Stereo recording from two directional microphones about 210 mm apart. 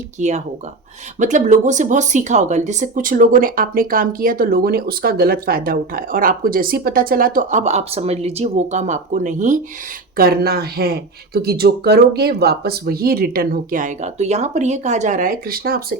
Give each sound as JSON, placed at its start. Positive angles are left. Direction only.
{"t": 0.2, "sound": "speech", "side_deg": -35}
{"t": 10.2, "sound": "speech", "side_deg": -45}